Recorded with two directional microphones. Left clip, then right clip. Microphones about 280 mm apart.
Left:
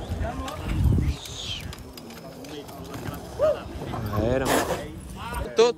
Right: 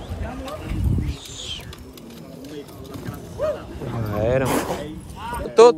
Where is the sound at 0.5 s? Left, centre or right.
Centre.